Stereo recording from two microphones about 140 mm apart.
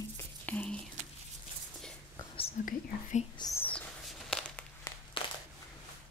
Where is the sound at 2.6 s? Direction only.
60° left (ahead or behind).